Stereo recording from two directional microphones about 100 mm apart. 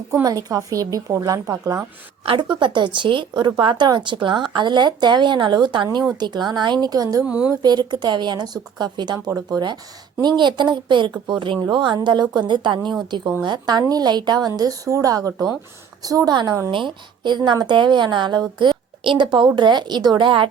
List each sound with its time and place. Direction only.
0.1 s a woman's voice: 35° right (ahead or behind)
2.2 s speech: 55° right (ahead or behind); by 7.3 s 40° right (ahead or behind)
7.3 s a woman's voice: 10° right (ahead or behind)
7.6 s a woman's voice: 45° right (ahead or behind)